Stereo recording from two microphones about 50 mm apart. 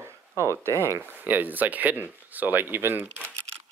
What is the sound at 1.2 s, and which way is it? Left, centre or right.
Speech, right.